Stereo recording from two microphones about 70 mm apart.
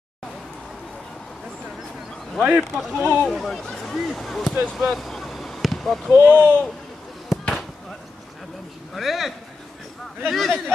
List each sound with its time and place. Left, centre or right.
2.7 s speech: centre
3.1 s speech: centre
3.6 s a sound: centre
3.9 s speech: centre
4.7 s basketball bounce: centre
6.2 s speech: centre
7.3 s fireworks: centre
8.9 s speech: centre